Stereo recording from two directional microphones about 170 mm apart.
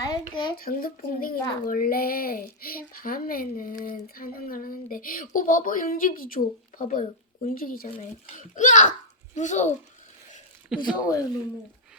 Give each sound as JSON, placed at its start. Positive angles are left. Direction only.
{"t": 0.0, "sound": "speech", "side_deg": 20}
{"t": 0.5, "sound": "a sound", "side_deg": 60}
{"t": 8.4, "sound": "a child's voice", "side_deg": 45}
{"t": 11.0, "sound": "speech", "side_deg": 20}